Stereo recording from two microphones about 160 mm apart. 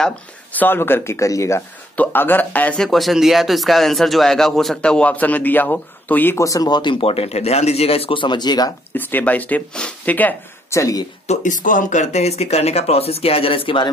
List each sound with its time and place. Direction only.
0.0 s speech: 10° left (ahead or behind); by 8.7 s 25° left (ahead or behind)
8.9 s speech: 10° left (ahead or behind)
11.2 s speech: 50° left (ahead or behind); by 13.8 s 35° left (ahead or behind)